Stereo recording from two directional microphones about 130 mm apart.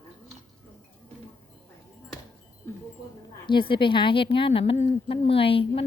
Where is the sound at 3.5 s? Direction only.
40° left (ahead or behind).